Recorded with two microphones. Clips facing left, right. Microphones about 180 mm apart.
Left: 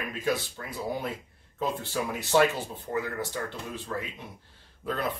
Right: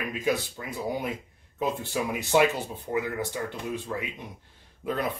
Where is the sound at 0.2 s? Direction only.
10° right (ahead or behind).